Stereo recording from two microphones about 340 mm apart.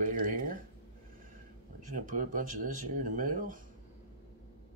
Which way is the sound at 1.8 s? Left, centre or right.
Right.